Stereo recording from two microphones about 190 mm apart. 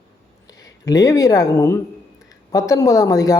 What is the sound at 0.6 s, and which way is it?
A man's voice, 20° left (ahead or behind).